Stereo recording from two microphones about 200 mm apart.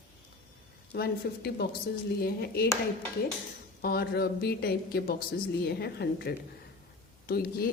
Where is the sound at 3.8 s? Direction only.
50° left (ahead or behind).